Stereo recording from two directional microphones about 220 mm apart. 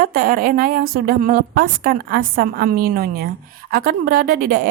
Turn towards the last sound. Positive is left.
turn(degrees=-40)  # may be behind; listen again after turning